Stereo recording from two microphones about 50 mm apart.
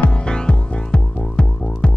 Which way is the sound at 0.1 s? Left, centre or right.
Centre.